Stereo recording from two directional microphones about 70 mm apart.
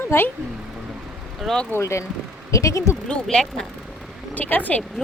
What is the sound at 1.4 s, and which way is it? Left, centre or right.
Speech, centre.